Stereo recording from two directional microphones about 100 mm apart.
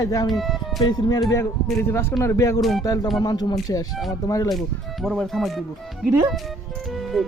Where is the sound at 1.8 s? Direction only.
25° left (ahead or behind).